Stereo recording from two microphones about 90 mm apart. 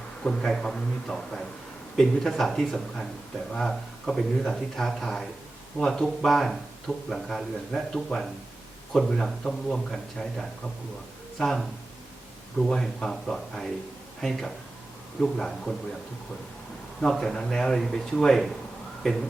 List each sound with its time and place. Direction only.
0.2 s a man's voice: 5° left (ahead or behind)
17.0 s speech: 5° left (ahead or behind)